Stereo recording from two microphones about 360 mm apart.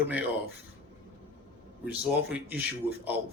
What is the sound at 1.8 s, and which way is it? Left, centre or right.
Speech, centre.